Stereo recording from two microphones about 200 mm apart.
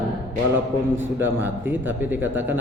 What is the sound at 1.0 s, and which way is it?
A man's voice, 10° right (ahead or behind).